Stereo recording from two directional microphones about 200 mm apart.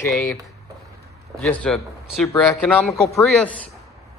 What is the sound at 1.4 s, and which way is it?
Speech, 5° left (ahead or behind).